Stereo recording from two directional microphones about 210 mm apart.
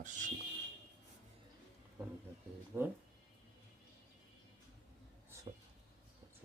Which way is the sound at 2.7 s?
10° right (ahead or behind).